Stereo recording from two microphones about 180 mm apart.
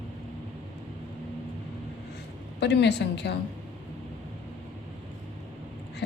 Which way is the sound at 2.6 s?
70° left (ahead or behind).